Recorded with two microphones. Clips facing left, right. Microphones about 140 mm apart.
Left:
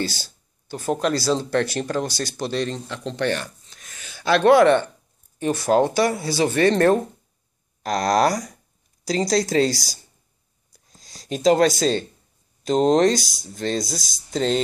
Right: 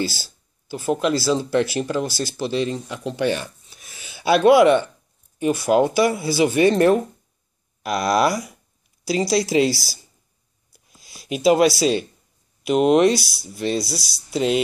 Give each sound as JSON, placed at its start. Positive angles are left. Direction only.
{"t": 0.2, "sound": "a sound", "side_deg": -10}
{"t": 1.0, "sound": "speech", "side_deg": -5}
{"t": 7.9, "sound": "speech", "side_deg": 40}
{"t": 9.0, "sound": "speech", "side_deg": -10}
{"t": 10.7, "sound": "a sound", "side_deg": -10}
{"t": 11.8, "sound": "speech", "side_deg": -10}